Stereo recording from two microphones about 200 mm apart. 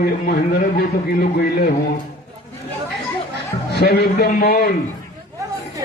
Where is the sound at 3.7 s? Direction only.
55° left (ahead or behind).